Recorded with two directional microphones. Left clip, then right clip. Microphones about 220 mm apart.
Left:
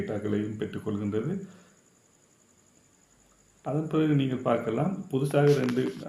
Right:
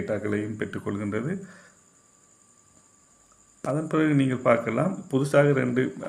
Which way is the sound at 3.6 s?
35° right (ahead or behind).